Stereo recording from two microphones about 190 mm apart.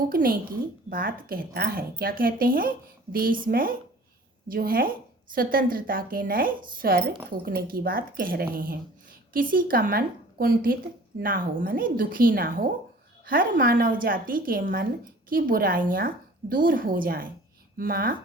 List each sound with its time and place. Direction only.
0.1 s speech: 50° right (ahead or behind)